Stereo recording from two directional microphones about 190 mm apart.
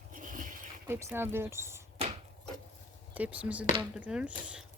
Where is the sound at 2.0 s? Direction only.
30° right (ahead or behind).